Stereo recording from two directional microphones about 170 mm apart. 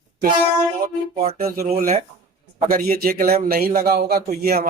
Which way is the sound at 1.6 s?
45° right (ahead or behind).